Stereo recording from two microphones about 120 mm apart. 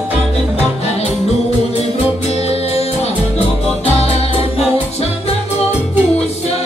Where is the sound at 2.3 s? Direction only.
60° left (ahead or behind).